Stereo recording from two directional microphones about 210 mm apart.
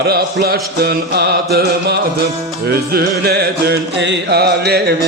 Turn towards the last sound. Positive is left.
turn(degrees=-50)  # may be behind; listen again after turning